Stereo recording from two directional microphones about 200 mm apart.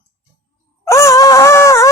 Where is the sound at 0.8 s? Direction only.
15° left (ahead or behind).